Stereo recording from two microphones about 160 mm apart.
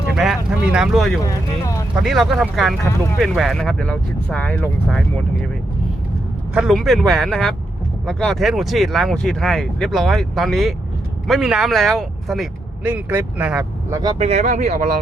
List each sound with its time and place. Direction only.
0.1 s speech: 5° right (ahead or behind)
1.2 s vehicle: 20° left (ahead or behind)
2.0 s speech: centre (ahead or behind)
6.5 s speech: 5° right (ahead or behind)
12.8 s speech: 10° right (ahead or behind)
13.9 s speech: 25° right (ahead or behind)
14.2 s speech: 40° right (ahead or behind)